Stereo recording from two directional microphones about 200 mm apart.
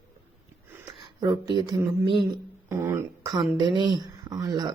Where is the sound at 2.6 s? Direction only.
15° right (ahead or behind).